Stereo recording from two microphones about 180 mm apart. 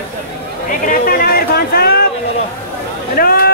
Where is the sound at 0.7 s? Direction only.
50° left (ahead or behind).